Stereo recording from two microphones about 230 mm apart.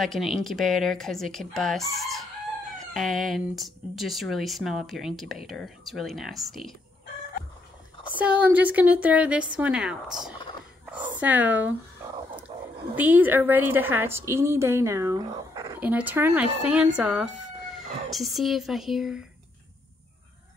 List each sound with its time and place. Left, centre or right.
0.0 s speech: centre
8.1 s a woman's voice: centre
12.5 s dog: centre
12.9 s a woman's voice: centre